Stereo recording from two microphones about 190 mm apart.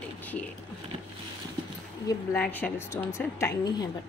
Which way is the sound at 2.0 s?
10° left (ahead or behind).